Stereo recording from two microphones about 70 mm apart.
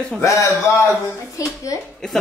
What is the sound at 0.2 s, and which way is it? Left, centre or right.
Speech, left.